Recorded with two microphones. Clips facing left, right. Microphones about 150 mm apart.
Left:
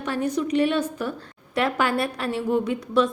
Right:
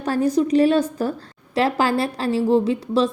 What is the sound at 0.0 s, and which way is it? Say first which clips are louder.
A woman's voice: right 6 dB; 35° right (ahead or behind).